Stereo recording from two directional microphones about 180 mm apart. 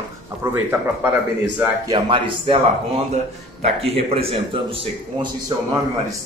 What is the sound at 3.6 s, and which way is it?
Speech, 35° right (ahead or behind).